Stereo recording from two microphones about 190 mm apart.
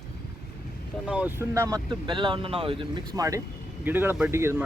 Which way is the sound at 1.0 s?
5° right (ahead or behind).